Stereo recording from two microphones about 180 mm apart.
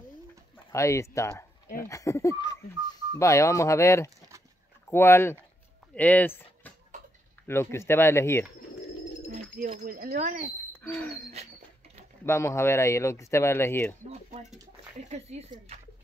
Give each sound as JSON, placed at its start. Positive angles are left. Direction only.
{"t": 0.7, "sound": "speech", "side_deg": 15}
{"t": 9.8, "sound": "speech", "side_deg": -50}
{"t": 10.7, "sound": "a sound", "side_deg": 10}
{"t": 12.3, "sound": "speech", "side_deg": 15}
{"t": 15.0, "sound": "speech", "side_deg": -35}